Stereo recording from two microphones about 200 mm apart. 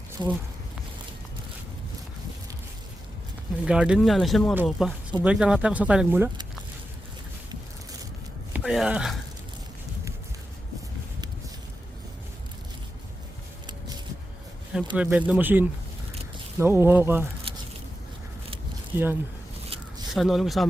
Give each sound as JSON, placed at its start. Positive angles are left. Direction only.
{"t": 0.2, "sound": "speech", "side_deg": -20}
{"t": 3.7, "sound": "speech", "side_deg": -5}
{"t": 8.5, "sound": "speech", "side_deg": 0}
{"t": 13.7, "sound": "a sound", "side_deg": -20}
{"t": 14.9, "sound": "speech", "side_deg": -5}
{"t": 17.5, "sound": "a sound", "side_deg": -30}
{"t": 18.9, "sound": "speech", "side_deg": -10}
{"t": 20.1, "sound": "speech", "side_deg": 0}